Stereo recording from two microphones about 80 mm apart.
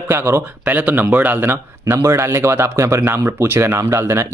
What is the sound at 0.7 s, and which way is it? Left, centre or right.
Speech, right.